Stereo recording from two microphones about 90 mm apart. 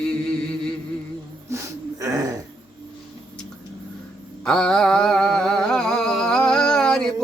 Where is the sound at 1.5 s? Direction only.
35° right (ahead or behind).